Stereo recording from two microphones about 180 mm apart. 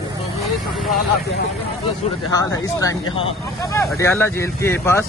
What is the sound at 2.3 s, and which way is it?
Speech, 20° left (ahead or behind).